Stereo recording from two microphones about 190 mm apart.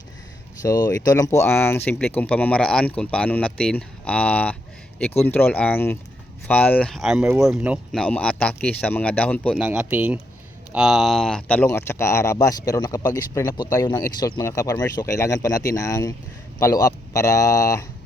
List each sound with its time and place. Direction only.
0.6 s speech: 20° left (ahead or behind); by 8.0 s 5° right (ahead or behind)
8.0 s speech: 5° left (ahead or behind)
9.6 s a man's voice: 5° right (ahead or behind); by 17.8 s 15° left (ahead or behind)